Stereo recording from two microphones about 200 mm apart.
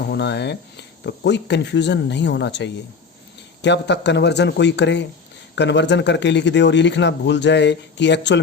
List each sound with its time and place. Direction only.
0.1 s speech: 60° left (ahead or behind)